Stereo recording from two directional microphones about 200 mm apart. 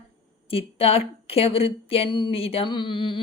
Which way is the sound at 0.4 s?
30° left (ahead or behind).